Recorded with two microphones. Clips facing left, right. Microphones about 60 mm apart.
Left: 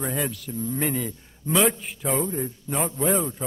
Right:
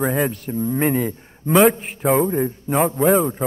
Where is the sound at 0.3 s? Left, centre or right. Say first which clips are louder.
Right 7 dB; right.